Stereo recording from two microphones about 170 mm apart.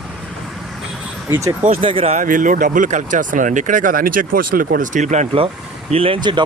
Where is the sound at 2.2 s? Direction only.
50° right (ahead or behind).